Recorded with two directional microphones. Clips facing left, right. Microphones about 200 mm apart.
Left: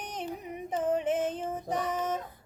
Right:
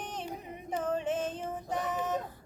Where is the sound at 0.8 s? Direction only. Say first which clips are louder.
Left 4 dB; 20° left (ahead or behind).